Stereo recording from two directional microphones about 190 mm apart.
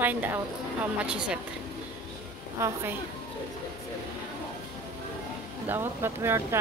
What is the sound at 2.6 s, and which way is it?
Speech, 15° right (ahead or behind).